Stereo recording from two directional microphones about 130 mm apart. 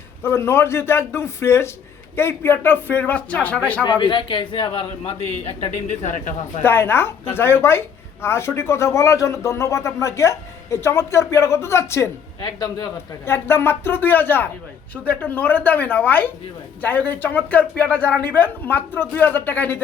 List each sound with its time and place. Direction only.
0.2 s a woman's voice: 20° left (ahead or behind)
3.8 s a man's voice: 35° left (ahead or behind)
5.7 s speech: 70° left (ahead or behind)
6.6 s a woman's voice: 15° left (ahead or behind)
12.4 s a man's voice: 30° left (ahead or behind)
13.2 s speech: 20° left (ahead or behind)